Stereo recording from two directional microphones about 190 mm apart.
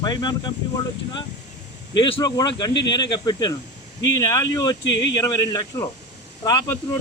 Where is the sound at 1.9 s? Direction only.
25° left (ahead or behind).